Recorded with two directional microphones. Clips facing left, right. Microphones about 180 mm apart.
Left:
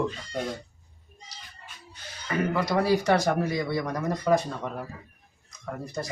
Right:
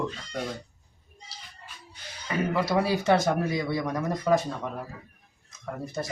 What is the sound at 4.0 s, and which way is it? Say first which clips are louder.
Speech: left 1 dB; 5° right (ahead or behind).